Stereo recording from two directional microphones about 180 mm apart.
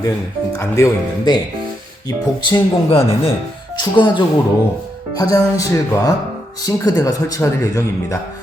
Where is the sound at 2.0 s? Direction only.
25° left (ahead or behind).